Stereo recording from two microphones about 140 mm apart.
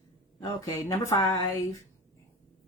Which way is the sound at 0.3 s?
20° left (ahead or behind).